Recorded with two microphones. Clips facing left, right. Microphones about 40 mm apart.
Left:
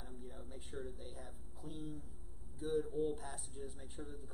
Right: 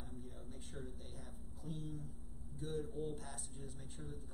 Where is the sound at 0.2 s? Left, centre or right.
Centre.